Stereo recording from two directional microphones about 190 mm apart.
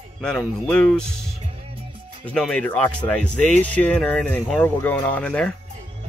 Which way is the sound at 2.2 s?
5° left (ahead or behind).